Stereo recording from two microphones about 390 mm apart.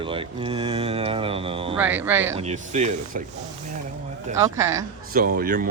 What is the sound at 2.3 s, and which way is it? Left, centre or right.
Speech, centre.